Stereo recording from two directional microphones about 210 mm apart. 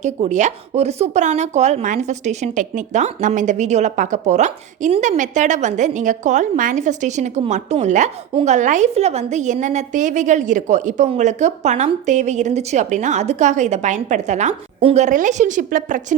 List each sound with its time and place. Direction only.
0.0 s speech: 35° right (ahead or behind)